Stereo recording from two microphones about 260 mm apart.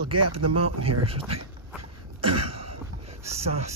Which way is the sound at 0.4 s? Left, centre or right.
Right.